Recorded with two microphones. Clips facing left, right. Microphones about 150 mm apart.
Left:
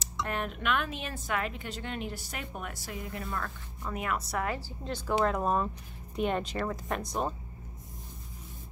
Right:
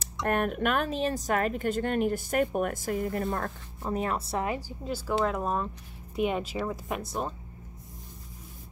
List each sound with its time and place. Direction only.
0.0 s speech: 55° right (ahead or behind); by 7.2 s 5° right (ahead or behind)